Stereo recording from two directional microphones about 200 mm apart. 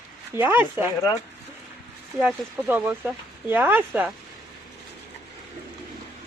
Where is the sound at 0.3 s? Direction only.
10° right (ahead or behind).